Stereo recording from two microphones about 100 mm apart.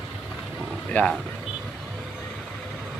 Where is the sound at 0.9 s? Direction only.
15° left (ahead or behind).